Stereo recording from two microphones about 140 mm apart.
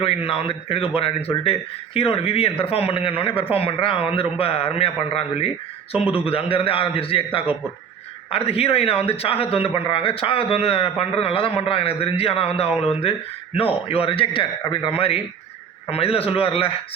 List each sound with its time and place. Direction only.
0.0 s a man's voice: 40° left (ahead or behind)